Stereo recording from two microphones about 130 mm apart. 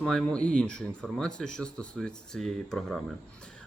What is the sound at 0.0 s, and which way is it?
Speech, 5° left (ahead or behind).